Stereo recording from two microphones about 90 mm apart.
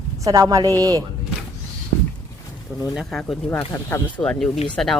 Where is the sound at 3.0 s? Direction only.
5° left (ahead or behind).